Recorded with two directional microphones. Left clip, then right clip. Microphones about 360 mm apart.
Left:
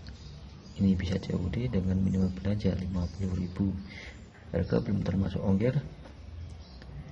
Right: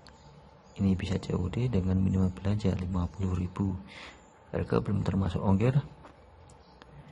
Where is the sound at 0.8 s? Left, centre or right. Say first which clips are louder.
Left 1 dB; centre.